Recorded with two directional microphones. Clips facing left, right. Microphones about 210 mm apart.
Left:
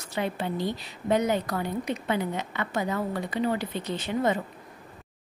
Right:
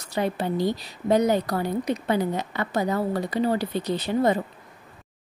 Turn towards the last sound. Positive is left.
turn(degrees=-35)  # may be behind; listen again after turning